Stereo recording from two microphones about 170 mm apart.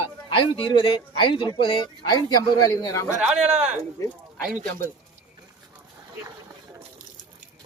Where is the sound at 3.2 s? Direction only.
5° right (ahead or behind).